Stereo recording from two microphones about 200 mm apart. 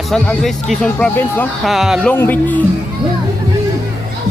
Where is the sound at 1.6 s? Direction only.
Centre (ahead or behind).